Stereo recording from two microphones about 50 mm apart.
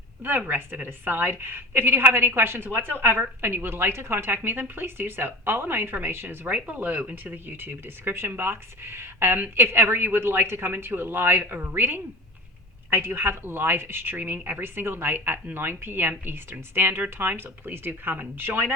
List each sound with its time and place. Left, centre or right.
0.2 s a woman's voice: right
6.2 s speech: right
7.4 s a woman's voice: right
14.6 s a woman's voice: right